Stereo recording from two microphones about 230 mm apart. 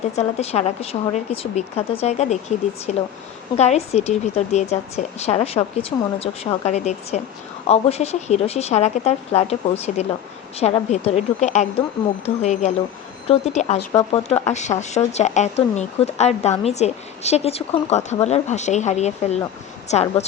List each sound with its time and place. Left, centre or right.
0.2 s speech: left